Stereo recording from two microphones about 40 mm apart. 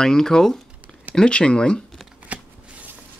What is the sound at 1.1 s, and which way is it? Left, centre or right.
Speech, left.